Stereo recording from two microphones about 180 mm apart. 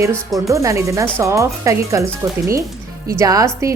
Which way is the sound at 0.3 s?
15° right (ahead or behind).